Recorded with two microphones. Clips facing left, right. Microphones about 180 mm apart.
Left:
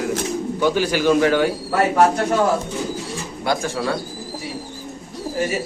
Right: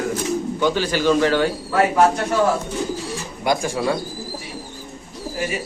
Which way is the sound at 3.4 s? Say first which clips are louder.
Right 2 dB; 15° right (ahead or behind).